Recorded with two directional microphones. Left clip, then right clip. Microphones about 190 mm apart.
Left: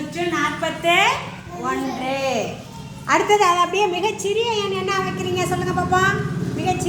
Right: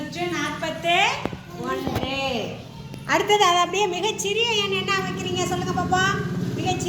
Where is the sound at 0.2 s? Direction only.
40° left (ahead or behind).